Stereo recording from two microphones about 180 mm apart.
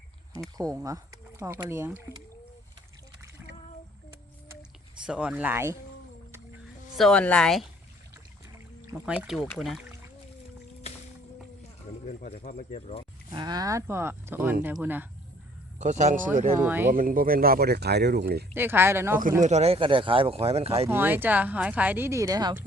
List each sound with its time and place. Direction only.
0.5 s speech: 20° right (ahead or behind)
5.0 s speech: 5° right (ahead or behind)
6.9 s speech: 5° left (ahead or behind)
8.5 s speech: 10° right (ahead or behind)
12.0 s speech: 40° left (ahead or behind)
13.3 s speech: 20° right (ahead or behind)
15.8 s speech: 40° right (ahead or behind)
16.6 s speech: 10° right (ahead or behind)
16.9 s speech: 50° right (ahead or behind)
18.5 s speech: 10° right (ahead or behind)
19.4 s speech: 40° right (ahead or behind)
20.8 s speech: 10° right (ahead or behind)